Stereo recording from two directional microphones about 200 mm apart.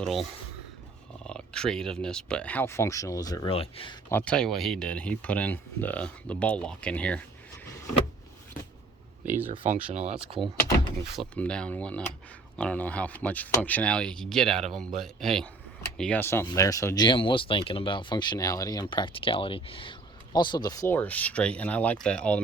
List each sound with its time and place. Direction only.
0.0 s speech: centre (ahead or behind)
1.3 s speech: 5° left (ahead or behind); by 3.9 s 30° left (ahead or behind)
4.1 s speech: 5° left (ahead or behind)
9.2 s speech: 10° right (ahead or behind)
9.5 s speech: 35° right (ahead or behind)
10.4 s speech: centre (ahead or behind)